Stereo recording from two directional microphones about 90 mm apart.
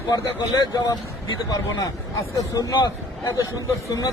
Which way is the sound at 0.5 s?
50° left (ahead or behind).